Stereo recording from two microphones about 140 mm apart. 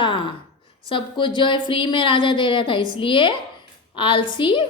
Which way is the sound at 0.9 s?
35° left (ahead or behind).